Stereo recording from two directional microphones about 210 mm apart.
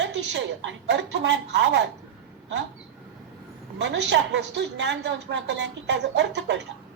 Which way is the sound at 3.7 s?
55° right (ahead or behind).